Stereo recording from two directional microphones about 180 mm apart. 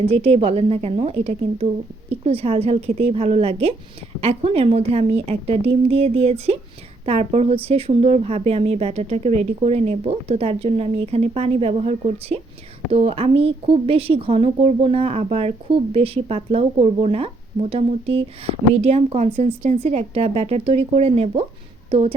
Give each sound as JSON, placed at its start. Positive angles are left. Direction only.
{"t": 0.1, "sound": "a woman's voice", "side_deg": -35}